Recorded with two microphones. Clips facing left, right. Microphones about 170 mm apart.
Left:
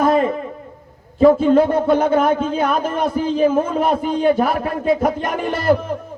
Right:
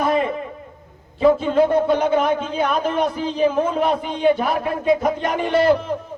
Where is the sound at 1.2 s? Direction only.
45° left (ahead or behind).